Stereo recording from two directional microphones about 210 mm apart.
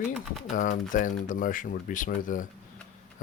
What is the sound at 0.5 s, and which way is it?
Speech, 40° left (ahead or behind).